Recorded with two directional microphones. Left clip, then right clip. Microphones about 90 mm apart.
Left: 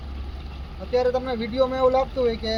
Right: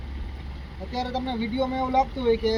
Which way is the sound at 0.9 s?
50° left (ahead or behind).